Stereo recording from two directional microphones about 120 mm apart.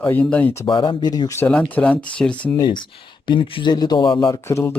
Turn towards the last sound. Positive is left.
turn(degrees=25)  # may be behind; listen again after turning